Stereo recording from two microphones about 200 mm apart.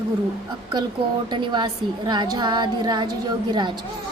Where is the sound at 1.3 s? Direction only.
20° right (ahead or behind).